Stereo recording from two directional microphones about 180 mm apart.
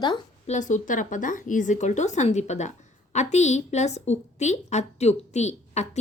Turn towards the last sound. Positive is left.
turn(degrees=40)  # may be behind; listen again after turning